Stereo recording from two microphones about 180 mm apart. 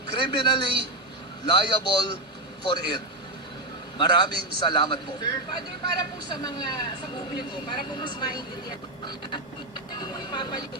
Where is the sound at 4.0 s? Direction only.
25° left (ahead or behind).